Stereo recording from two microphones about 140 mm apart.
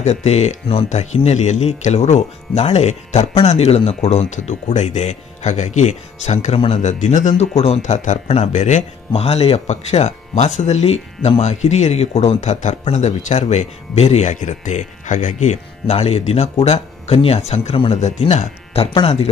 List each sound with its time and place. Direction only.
0.0 s speech: 50° left (ahead or behind)